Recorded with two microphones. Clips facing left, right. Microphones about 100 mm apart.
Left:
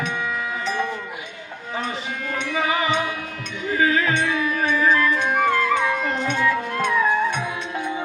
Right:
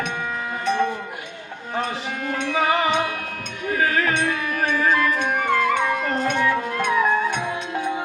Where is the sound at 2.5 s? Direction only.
60° right (ahead or behind).